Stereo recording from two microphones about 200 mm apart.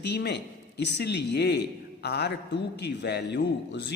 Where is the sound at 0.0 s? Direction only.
55° left (ahead or behind).